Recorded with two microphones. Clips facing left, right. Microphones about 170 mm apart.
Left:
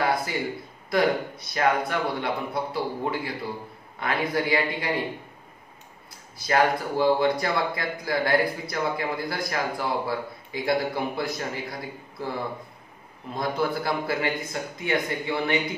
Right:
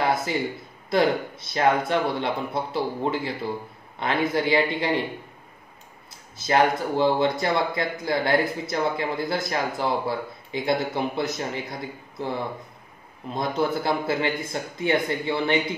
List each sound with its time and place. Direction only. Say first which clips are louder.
0.0 s a sound: right 2 dB; 25° right (ahead or behind)
0.8 s speech: right 1 dB; 25° right (ahead or behind)
6.3 s speech: right 1 dB; 25° right (ahead or behind)
13.3 s speech: right 2 dB; 20° right (ahead or behind)